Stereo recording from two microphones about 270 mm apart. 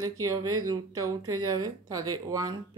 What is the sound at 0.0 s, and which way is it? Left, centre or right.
Speech, centre.